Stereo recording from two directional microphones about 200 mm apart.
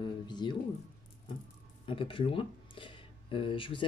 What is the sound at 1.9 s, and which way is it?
Speech, 25° left (ahead or behind).